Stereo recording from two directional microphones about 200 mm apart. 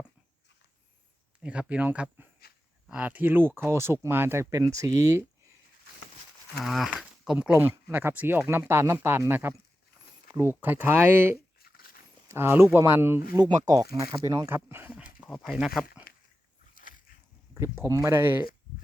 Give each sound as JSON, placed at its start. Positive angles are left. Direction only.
{"t": 1.4, "sound": "speech", "side_deg": -5}
{"t": 6.6, "sound": "speech", "side_deg": 0}
{"t": 11.6, "sound": "dog", "side_deg": 50}
{"t": 12.3, "sound": "speech", "side_deg": -10}
{"t": 17.5, "sound": "speech", "side_deg": -15}